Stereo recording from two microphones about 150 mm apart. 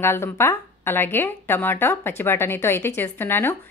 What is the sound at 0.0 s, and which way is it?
A woman's voice, 15° left (ahead or behind).